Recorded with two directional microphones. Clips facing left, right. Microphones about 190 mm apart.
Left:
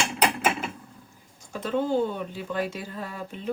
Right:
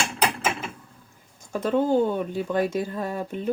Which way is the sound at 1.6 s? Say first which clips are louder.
Right 4 dB; 45° right (ahead or behind).